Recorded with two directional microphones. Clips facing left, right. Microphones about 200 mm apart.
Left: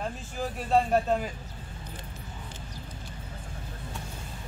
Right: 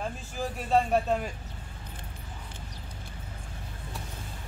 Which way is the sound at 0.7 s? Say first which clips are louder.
Left 1 dB; centre (ahead or behind).